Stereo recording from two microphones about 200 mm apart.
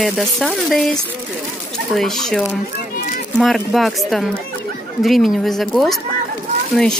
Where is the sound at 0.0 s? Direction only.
Centre (ahead or behind).